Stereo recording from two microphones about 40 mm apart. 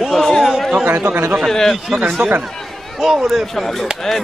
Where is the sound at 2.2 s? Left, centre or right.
Right.